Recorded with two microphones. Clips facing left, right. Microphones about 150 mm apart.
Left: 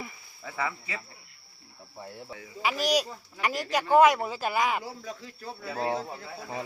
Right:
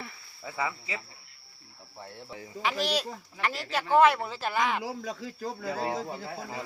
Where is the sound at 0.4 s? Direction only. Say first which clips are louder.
Even; 25° right (ahead or behind).